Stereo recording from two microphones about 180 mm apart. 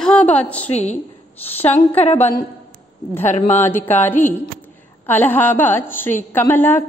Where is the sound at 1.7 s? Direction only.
35° left (ahead or behind).